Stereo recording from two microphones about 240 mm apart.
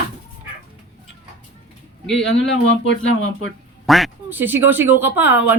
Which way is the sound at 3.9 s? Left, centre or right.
Centre.